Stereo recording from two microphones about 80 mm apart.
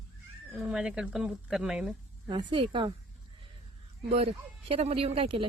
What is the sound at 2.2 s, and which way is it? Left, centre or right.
Speech, right.